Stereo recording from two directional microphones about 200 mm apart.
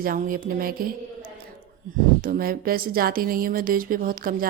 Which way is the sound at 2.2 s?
45° right (ahead or behind).